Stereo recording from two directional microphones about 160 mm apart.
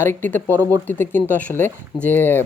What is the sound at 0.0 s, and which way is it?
Speech, 15° left (ahead or behind).